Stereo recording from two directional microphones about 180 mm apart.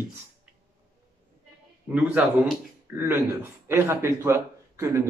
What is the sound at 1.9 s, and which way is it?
Speech, 5° right (ahead or behind).